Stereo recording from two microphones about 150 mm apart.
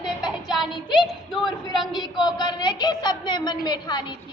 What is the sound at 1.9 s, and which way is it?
A woman's voice, 30° left (ahead or behind).